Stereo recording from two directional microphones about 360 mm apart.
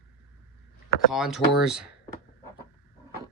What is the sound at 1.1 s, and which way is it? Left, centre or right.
Speech, centre.